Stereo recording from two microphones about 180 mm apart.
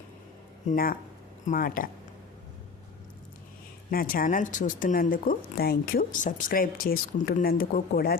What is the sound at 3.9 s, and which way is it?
Speech, 50° left (ahead or behind).